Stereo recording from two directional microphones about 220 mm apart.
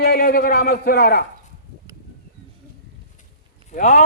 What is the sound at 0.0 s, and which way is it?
A man's voice, 40° left (ahead or behind).